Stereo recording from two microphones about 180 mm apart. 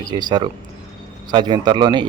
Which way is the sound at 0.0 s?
25° right (ahead or behind).